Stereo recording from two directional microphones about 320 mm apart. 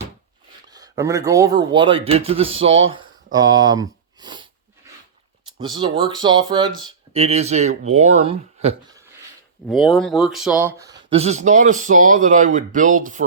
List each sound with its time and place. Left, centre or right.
0.7 s speech: centre
5.5 s speech: centre
9.6 s speech: centre; by 13.2 s right